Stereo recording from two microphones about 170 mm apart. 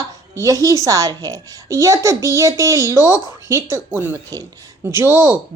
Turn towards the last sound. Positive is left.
turn(degrees=-15)  # may be behind; listen again after turning